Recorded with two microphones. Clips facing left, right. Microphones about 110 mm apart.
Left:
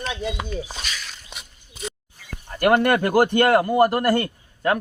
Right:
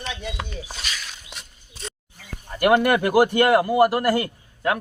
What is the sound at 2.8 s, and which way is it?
A man's voice, 5° right (ahead or behind).